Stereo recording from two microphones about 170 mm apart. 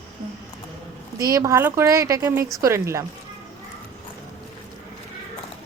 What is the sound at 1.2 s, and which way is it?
A woman's voice, 20° right (ahead or behind).